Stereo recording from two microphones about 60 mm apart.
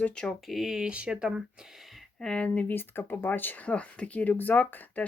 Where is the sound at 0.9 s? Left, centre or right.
Centre.